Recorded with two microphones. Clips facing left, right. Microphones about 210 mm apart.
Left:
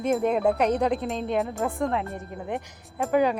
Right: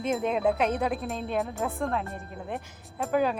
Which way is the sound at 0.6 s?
15° left (ahead or behind).